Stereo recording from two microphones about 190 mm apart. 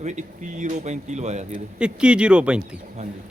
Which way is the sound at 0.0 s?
40° right (ahead or behind).